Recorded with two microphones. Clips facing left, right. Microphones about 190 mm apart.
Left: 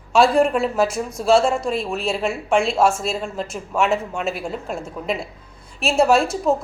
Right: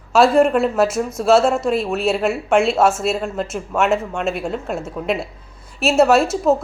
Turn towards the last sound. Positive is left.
turn(degrees=-5)  # may be behind; listen again after turning